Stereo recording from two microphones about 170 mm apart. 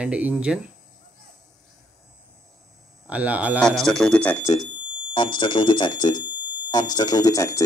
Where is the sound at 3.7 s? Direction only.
Centre (ahead or behind).